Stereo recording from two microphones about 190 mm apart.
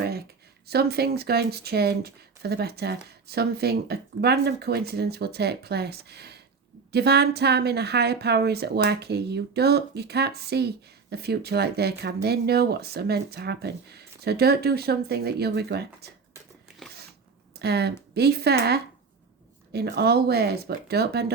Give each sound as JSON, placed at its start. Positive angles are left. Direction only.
{"t": 0.7, "sound": "speech", "side_deg": -55}
{"t": 17.6, "sound": "speech", "side_deg": -60}